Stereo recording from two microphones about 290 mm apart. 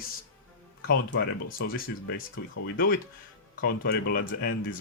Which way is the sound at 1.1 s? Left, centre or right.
Left.